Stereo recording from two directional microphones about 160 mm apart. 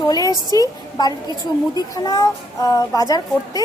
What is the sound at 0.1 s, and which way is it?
A woman's voice, 20° left (ahead or behind).